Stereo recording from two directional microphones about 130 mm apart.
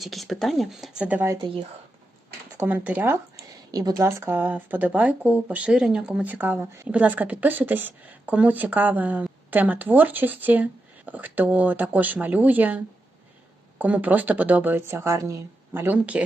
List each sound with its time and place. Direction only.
0.0 s speech: centre (ahead or behind)
1.4 s speech: 40° right (ahead or behind)
2.6 s speech: 15° right (ahead or behind)
3.7 s speech: 30° right (ahead or behind); by 16.2 s 10° right (ahead or behind)